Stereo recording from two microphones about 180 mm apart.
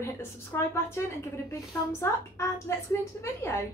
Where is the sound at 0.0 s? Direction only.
15° left (ahead or behind).